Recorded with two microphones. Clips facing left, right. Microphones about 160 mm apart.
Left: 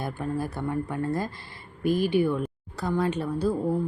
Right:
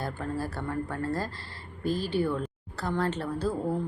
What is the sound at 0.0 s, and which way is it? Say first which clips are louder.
Speech: left 3 dB; 15° left (ahead or behind).